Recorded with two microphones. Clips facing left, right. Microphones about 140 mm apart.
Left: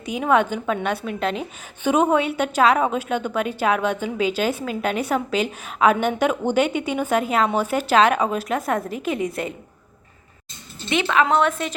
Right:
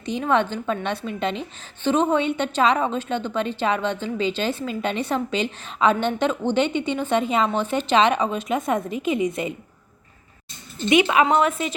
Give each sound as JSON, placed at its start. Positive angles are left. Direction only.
{"t": 0.0, "sound": "a woman's voice", "side_deg": 10}
{"t": 10.8, "sound": "a woman's voice", "side_deg": -15}